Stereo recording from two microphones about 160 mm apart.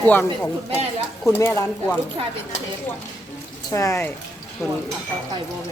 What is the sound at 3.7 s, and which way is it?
Speech, 20° left (ahead or behind).